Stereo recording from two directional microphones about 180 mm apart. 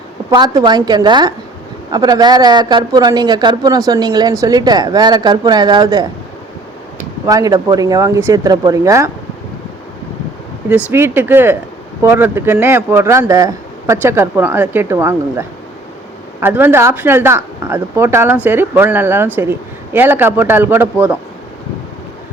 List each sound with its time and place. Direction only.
0.3 s a woman's voice: 25° right (ahead or behind)
7.3 s a woman's voice: 20° right (ahead or behind)
10.9 s speech: 10° right (ahead or behind)